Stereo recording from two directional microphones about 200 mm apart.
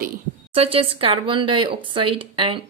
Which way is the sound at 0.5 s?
30° right (ahead or behind).